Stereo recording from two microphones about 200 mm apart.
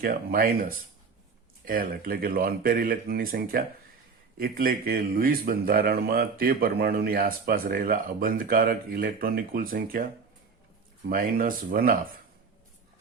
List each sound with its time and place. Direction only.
0.0 s speech: 50° right (ahead or behind)
11.1 s speech: 45° right (ahead or behind)